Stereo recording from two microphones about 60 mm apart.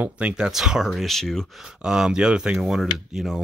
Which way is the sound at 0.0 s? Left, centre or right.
Centre.